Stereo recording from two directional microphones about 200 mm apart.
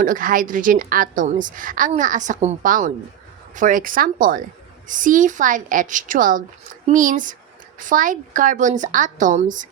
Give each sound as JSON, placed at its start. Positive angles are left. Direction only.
{"t": 0.0, "sound": "a woman's voice", "side_deg": -40}